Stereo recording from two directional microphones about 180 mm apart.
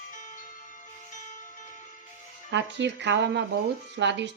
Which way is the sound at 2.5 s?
75° right (ahead or behind).